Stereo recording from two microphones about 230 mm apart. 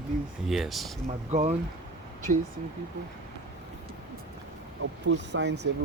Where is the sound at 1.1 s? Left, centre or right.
Right.